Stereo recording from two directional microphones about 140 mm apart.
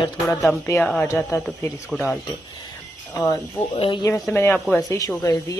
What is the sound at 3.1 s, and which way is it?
Speech, 20° left (ahead or behind).